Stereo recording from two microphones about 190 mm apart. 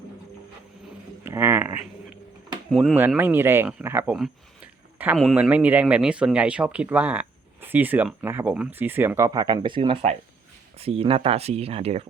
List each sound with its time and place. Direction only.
1.2 s speech: 10° right (ahead or behind)
2.7 s speech: 5° right (ahead or behind); by 12.0 s 30° right (ahead or behind)